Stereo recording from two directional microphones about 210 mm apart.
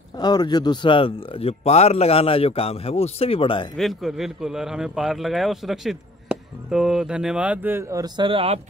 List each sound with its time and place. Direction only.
0.2 s speech: 20° left (ahead or behind)
3.7 s a man's voice: centre (ahead or behind); by 8.5 s 25° right (ahead or behind)